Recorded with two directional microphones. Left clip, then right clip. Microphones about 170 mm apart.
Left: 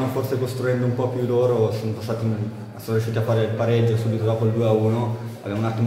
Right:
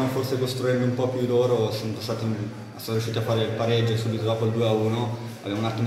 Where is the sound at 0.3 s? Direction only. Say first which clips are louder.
Even; 15° left (ahead or behind).